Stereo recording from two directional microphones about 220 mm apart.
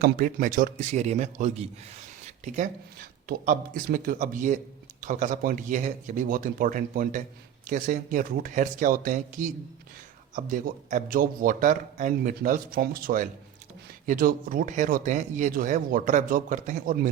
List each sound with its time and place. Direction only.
0.0 s speech: 40° right (ahead or behind)